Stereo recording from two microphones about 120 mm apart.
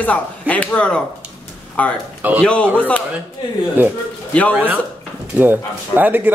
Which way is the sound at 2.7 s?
10° left (ahead or behind).